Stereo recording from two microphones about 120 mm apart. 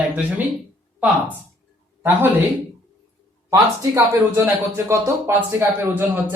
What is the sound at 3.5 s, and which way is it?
Speech, 25° right (ahead or behind).